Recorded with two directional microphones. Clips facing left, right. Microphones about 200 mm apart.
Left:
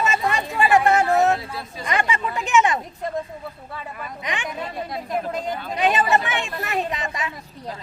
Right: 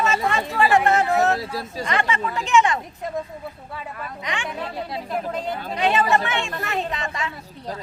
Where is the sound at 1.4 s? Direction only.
40° right (ahead or behind).